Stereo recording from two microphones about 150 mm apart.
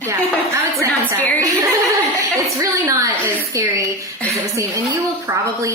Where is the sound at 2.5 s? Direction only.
20° right (ahead or behind).